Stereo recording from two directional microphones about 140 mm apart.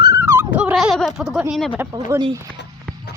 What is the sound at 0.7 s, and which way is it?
Speech, centre (ahead or behind).